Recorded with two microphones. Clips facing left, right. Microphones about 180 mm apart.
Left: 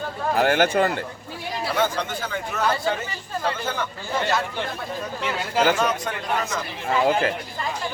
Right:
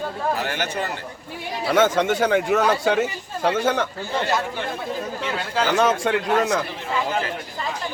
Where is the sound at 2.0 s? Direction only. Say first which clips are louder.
Right 10 dB; 80° right.